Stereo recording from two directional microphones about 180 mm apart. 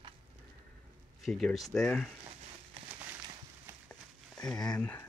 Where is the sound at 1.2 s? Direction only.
Centre (ahead or behind).